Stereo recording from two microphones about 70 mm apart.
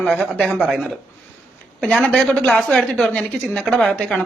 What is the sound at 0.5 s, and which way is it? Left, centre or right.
Speech, centre.